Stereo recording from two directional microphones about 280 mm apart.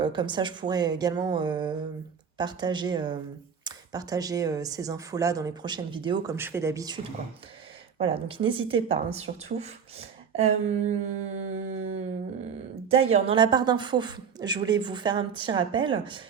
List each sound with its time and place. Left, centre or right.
0.0 s speech: centre
12.9 s speech: right